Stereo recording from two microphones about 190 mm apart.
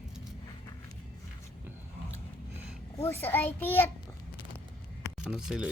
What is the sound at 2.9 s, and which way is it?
Speech, 10° left (ahead or behind).